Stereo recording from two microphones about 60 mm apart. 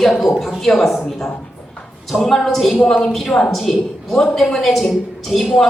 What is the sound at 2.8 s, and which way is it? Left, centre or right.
A woman's voice, centre.